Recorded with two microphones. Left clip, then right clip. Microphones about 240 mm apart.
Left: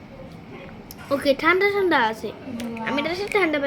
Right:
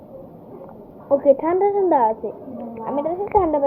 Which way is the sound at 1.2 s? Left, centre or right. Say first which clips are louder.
Right 1 dB; centre.